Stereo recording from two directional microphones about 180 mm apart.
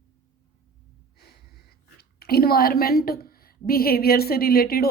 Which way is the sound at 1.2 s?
60° left (ahead or behind).